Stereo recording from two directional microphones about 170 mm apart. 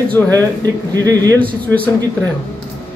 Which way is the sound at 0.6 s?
20° right (ahead or behind).